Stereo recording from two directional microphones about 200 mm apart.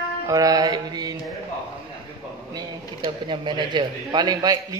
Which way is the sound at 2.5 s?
25° right (ahead or behind).